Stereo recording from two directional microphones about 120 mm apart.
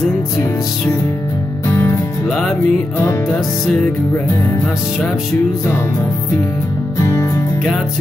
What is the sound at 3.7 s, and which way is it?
Speech, 15° left (ahead or behind).